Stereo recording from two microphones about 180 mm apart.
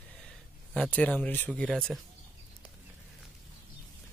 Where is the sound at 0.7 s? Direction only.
10° left (ahead or behind).